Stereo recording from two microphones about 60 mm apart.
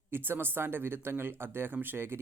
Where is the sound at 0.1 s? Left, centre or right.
Right.